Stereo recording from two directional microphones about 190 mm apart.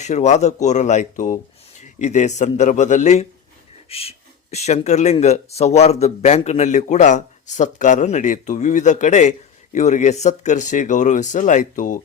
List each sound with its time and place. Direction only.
0.0 s speech: 35° left (ahead or behind)